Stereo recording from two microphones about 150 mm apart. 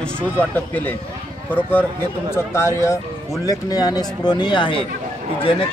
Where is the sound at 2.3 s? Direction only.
20° left (ahead or behind).